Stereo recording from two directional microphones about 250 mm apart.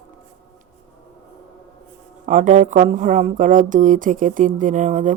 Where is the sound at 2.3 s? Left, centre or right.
Right.